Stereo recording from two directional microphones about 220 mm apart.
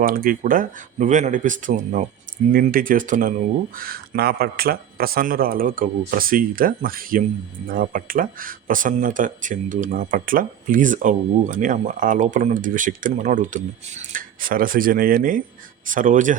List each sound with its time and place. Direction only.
0.0 s speech: 40° right (ahead or behind)